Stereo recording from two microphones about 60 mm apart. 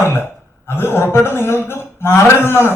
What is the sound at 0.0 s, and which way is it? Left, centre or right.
Speech, left.